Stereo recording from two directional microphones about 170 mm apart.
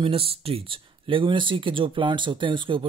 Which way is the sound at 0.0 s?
35° right (ahead or behind).